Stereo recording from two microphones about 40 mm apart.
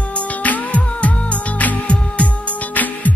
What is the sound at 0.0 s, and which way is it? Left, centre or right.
Music, left.